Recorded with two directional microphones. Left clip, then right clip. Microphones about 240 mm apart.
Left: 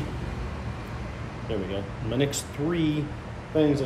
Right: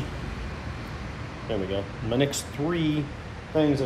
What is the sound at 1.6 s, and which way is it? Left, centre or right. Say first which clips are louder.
Speech: right 3 dB; centre.